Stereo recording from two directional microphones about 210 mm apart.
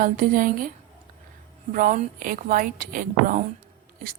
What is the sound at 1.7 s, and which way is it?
A woman's voice, 40° right (ahead or behind).